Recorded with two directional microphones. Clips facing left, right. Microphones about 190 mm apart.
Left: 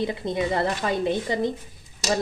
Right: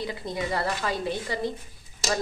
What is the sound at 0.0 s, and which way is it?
Speech, 25° left (ahead or behind).